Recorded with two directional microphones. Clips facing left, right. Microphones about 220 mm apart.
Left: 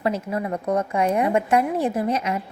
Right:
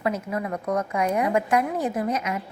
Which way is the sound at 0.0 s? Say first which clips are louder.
Left 2 dB; 30° left (ahead or behind).